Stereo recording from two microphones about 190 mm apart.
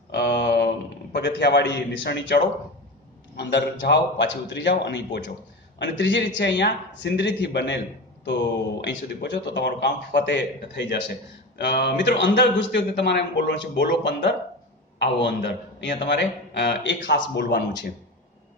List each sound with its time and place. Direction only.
0.1 s a sound: 65° left (ahead or behind)
1.1 s a man's voice: 65° left (ahead or behind)
8.8 s a man's voice: 65° left (ahead or behind)